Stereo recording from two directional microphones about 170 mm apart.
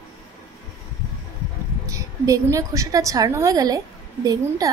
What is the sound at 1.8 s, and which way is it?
A woman's voice, 20° right (ahead or behind).